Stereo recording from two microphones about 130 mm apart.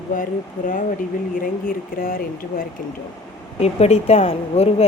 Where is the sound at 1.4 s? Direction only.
90° left.